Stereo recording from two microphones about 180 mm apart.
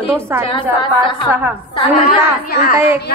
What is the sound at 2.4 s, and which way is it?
Child singing, 50° left (ahead or behind).